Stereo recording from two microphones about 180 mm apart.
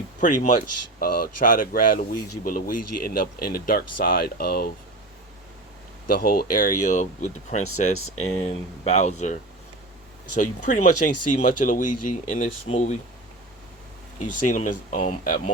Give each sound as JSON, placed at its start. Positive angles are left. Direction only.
{"t": 0.2, "sound": "speech", "side_deg": 45}
{"t": 6.1, "sound": "speech", "side_deg": 55}
{"t": 10.4, "sound": "speech", "side_deg": 45}
{"t": 14.2, "sound": "speech", "side_deg": 45}